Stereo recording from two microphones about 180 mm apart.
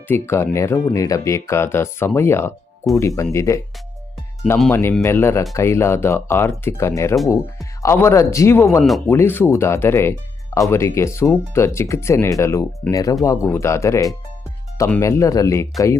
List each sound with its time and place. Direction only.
0.1 s speech: 10° left (ahead or behind)
4.7 s speech: 15° left (ahead or behind)